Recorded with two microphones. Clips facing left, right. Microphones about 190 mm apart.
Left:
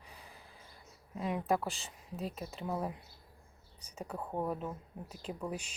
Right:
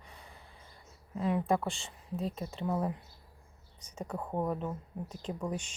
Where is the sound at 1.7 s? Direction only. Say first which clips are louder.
Right 5 dB; 30° right (ahead or behind).